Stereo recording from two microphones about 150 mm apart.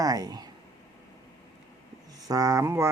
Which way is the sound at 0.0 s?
25° right (ahead or behind).